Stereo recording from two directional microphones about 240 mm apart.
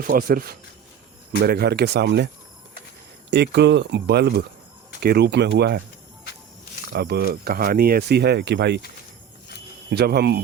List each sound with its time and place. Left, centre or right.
0.0 s speech: right
6.9 s speech: right
9.9 s speech: right